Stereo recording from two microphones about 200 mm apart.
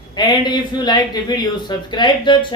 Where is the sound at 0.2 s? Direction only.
20° left (ahead or behind).